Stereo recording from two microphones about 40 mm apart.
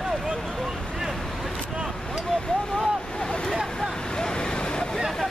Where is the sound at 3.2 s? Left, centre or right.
Left.